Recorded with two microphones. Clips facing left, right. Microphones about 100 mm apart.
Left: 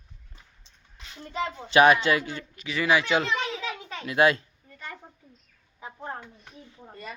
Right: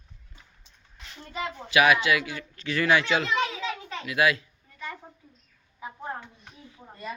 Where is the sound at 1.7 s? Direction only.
35° left (ahead or behind).